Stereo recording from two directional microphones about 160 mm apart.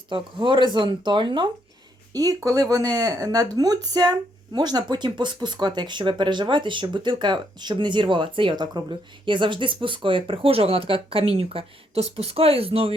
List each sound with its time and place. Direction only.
0.1 s speech: 30° right (ahead or behind)